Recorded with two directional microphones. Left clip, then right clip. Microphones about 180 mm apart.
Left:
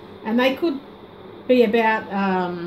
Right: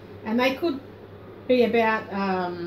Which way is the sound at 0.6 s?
50° left (ahead or behind).